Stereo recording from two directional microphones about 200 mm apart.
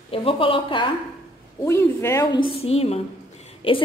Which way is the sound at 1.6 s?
15° left (ahead or behind).